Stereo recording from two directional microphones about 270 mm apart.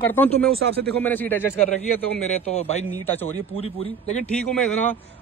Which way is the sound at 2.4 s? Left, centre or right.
Left.